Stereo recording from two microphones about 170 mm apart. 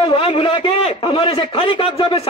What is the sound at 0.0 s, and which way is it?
A man's voice, 30° left (ahead or behind).